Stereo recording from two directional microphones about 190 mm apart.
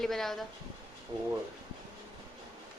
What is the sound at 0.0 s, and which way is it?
Speech, centre (ahead or behind).